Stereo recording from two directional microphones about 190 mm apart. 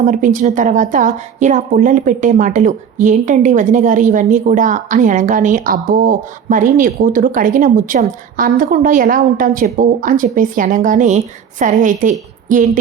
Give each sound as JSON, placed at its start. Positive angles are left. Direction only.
{"t": 0.0, "sound": "a woman's voice", "side_deg": -40}